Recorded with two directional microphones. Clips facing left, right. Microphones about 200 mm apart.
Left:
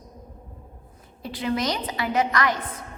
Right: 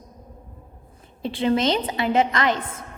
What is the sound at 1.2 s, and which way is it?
A woman's voice, 25° right (ahead or behind).